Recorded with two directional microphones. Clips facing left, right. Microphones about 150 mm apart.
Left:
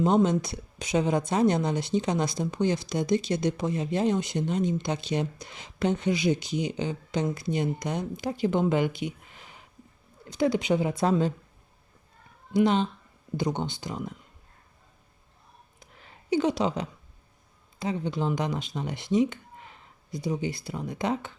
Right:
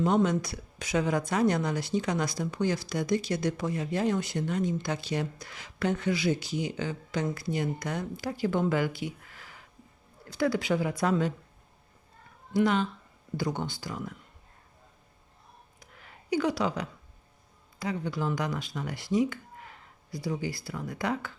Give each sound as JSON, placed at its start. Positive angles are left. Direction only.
{"t": 0.0, "sound": "speech", "side_deg": 25}
{"t": 12.5, "sound": "speech", "side_deg": 25}
{"t": 15.8, "sound": "a sound", "side_deg": 25}
{"t": 17.7, "sound": "speech", "side_deg": 25}